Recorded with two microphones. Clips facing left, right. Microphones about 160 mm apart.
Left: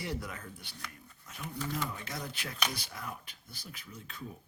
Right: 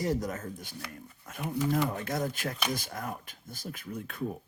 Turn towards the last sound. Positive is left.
turn(degrees=-55)  # may be behind; listen again after turning